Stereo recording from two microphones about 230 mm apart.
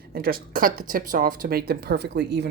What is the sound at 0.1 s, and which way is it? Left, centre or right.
Speech, right.